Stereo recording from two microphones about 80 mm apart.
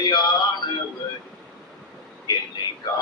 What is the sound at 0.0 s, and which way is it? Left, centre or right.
Male singing, left.